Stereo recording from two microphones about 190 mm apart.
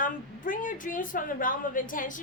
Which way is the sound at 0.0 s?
45° left (ahead or behind).